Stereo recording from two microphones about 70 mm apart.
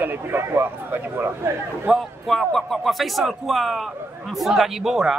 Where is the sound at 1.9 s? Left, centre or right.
Centre.